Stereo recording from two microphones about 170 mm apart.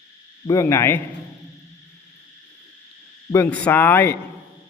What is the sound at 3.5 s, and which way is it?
Speech, 10° left (ahead or behind).